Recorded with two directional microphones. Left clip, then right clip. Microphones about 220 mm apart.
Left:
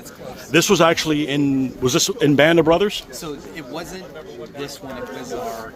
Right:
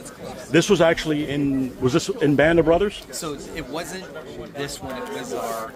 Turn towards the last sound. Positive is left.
turn(degrees=-15)  # may be behind; listen again after turning